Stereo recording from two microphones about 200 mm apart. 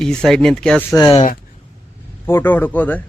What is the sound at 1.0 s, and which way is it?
Speech, 25° left (ahead or behind).